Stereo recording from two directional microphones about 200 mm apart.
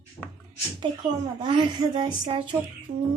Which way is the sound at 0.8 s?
25° right (ahead or behind).